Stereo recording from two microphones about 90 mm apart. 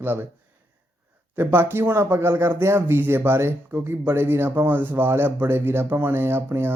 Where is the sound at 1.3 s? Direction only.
25° right (ahead or behind).